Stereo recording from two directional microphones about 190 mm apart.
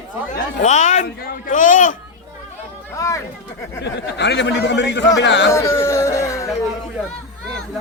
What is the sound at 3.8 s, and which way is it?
Speech, 65° left (ahead or behind).